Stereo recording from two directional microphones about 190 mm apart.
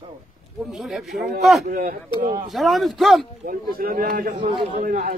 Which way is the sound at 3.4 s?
50° right (ahead or behind).